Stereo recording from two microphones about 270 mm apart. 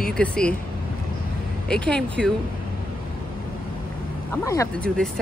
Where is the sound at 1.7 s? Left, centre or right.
Centre.